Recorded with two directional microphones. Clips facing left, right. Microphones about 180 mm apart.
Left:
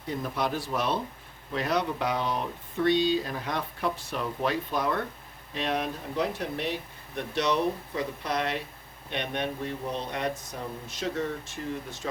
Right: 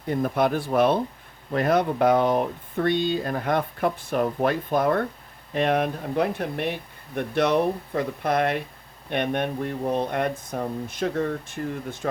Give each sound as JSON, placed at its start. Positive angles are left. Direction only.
{"t": 0.1, "sound": "speech", "side_deg": -55}